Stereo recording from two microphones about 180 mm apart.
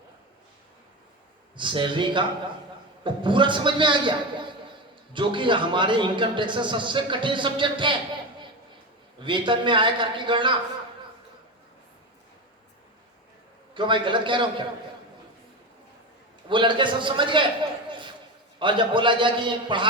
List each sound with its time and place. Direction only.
1.5 s a man's voice: 25° right (ahead or behind)
9.2 s a man's voice: 25° right (ahead or behind)
13.7 s a man's voice: 25° right (ahead or behind)
16.5 s a man's voice: 25° right (ahead or behind)